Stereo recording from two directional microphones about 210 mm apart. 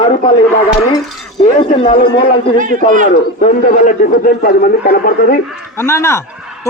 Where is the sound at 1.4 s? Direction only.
25° left (ahead or behind).